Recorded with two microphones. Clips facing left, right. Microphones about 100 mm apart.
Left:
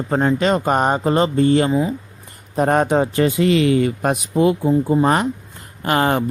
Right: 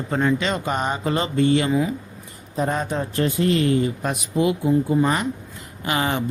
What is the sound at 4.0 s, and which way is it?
Speech, 55° left (ahead or behind).